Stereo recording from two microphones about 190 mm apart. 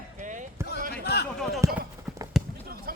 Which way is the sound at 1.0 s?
60° left (ahead or behind).